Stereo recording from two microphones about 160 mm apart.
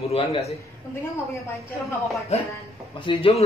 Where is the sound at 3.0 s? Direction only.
35° left (ahead or behind).